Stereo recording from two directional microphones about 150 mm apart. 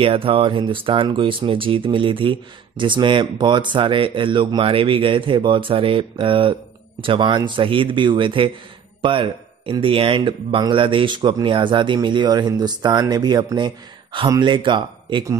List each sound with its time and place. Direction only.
0.0 s speech: 35° right (ahead or behind)